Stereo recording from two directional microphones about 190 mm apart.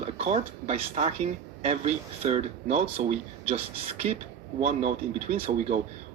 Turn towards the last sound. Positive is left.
turn(degrees=-35)  # may be behind; listen again after turning